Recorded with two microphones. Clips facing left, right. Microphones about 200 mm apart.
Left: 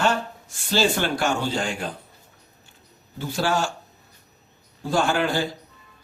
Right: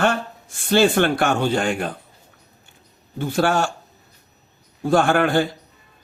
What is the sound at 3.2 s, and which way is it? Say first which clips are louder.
Speech: right 4 dB; 55° right (ahead or behind).